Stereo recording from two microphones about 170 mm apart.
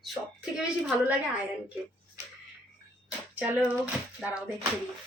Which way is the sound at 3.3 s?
10° right (ahead or behind).